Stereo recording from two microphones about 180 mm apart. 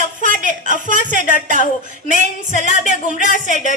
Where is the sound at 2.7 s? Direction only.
45° left (ahead or behind).